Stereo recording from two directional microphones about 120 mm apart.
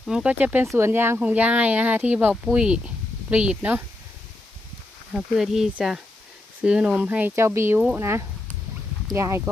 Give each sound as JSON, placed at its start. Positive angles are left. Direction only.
{"t": 0.0, "sound": "speech", "side_deg": -5}
{"t": 5.1, "sound": "speech", "side_deg": -5}